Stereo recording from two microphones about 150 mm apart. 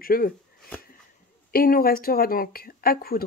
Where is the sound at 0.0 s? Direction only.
75° left (ahead or behind).